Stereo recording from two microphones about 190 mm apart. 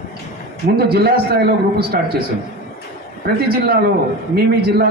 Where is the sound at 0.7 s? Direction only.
55° right (ahead or behind).